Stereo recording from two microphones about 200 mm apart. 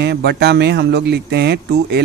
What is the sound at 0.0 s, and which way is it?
Speech, 55° right (ahead or behind).